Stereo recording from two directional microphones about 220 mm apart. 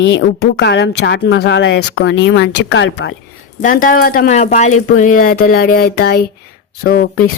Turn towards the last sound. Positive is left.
turn(degrees=45)  # may be behind; listen again after turning